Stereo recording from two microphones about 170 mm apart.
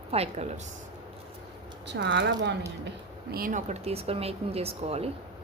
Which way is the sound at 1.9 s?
90° right.